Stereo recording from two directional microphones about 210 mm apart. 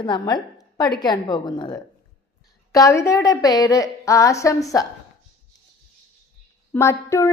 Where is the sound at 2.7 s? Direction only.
15° left (ahead or behind).